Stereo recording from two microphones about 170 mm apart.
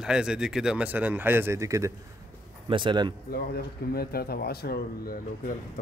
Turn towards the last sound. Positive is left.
turn(degrees=60)  # may be behind; listen again after turning